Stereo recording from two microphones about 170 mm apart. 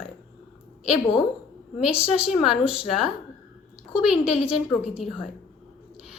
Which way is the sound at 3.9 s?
35° left (ahead or behind).